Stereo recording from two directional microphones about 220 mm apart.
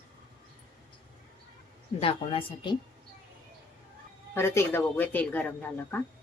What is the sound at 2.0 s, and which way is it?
Speech, 25° left (ahead or behind).